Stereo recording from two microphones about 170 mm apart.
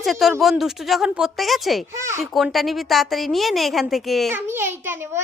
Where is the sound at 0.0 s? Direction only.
Centre (ahead or behind).